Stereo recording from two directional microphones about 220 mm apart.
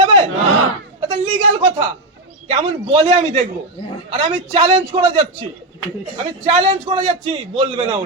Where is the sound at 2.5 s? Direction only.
25° right (ahead or behind).